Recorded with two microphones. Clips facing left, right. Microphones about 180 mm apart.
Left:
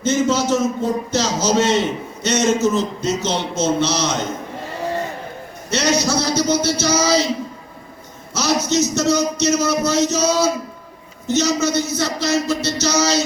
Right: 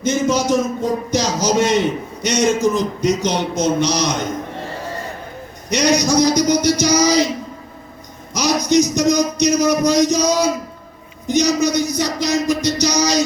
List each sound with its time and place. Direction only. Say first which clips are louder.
0.0 s a man's voice: even; 15° right (ahead or behind)
5.7 s a man's voice: right 3 dB; 15° right (ahead or behind)
8.3 s a man's voice: right 3 dB; 15° right (ahead or behind)